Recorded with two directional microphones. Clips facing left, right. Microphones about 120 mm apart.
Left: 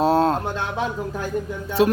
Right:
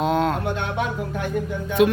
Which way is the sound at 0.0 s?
35° left (ahead or behind).